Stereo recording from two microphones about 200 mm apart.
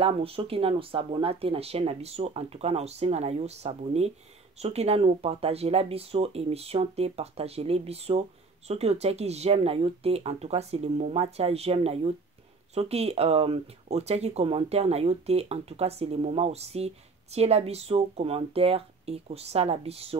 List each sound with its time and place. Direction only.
0.0 s speech: 30° right (ahead or behind)